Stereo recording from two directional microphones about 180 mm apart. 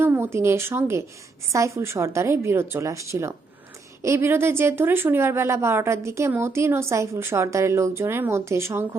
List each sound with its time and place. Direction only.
0.0 s a woman's voice: 10° right (ahead or behind)